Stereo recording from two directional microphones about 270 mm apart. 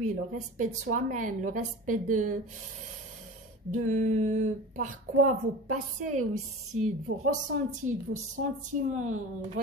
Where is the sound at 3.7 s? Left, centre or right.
Right.